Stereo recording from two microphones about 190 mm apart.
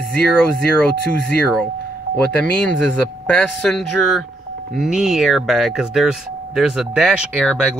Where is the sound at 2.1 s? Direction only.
5° left (ahead or behind).